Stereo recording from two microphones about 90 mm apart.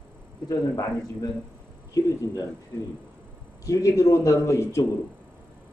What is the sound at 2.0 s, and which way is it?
Speech, 45° left (ahead or behind).